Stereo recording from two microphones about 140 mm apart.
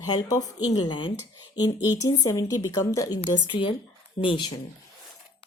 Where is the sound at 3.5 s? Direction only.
35° left (ahead or behind).